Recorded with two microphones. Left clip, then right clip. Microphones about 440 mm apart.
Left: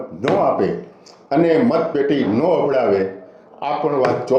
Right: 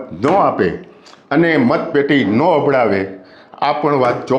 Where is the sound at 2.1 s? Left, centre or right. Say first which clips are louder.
Right 5 dB; right.